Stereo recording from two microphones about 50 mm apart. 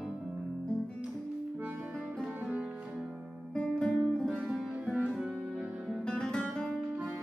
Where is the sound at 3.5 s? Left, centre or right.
Centre.